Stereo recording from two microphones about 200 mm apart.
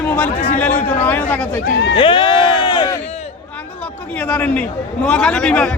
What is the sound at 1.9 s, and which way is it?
Speech, 25° left (ahead or behind).